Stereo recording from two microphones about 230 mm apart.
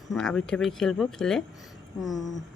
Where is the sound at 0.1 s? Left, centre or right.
Centre.